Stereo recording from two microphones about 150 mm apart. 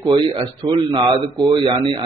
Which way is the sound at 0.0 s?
30° right (ahead or behind).